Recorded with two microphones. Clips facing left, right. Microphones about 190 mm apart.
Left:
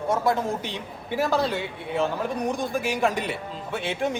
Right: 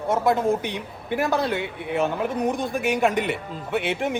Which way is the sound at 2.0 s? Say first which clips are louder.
Right 2 dB; 20° right (ahead or behind).